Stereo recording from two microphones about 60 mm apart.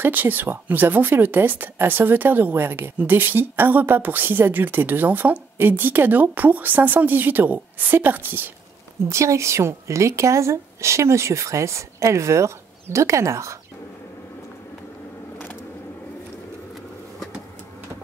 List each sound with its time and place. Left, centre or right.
0.0 s speech: right
9.1 s speech: right